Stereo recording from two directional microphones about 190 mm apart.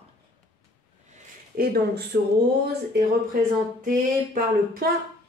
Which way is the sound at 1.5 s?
50° right (ahead or behind).